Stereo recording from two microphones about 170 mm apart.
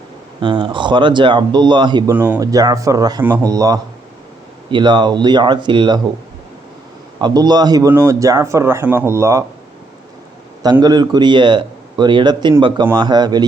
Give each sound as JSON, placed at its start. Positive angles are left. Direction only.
{"t": 0.4, "sound": "a man's voice", "side_deg": -30}
{"t": 2.1, "sound": "speech", "side_deg": -10}
{"t": 2.4, "sound": "a man's voice", "side_deg": -20}
{"t": 7.2, "sound": "speech", "side_deg": -25}
{"t": 10.6, "sound": "a man's voice", "side_deg": -25}